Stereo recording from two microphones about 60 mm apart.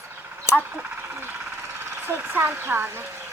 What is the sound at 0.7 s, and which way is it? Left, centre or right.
Speech, right.